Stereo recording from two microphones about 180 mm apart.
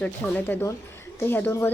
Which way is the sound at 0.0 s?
10° left (ahead or behind).